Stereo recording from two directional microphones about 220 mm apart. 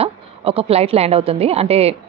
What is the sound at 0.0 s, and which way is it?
A woman's voice, 25° right (ahead or behind).